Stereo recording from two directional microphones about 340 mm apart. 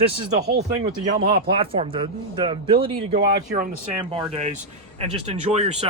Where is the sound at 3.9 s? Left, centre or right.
Centre.